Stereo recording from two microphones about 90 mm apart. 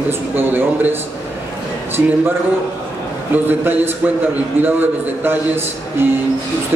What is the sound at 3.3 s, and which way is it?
A man's voice, 20° right (ahead or behind).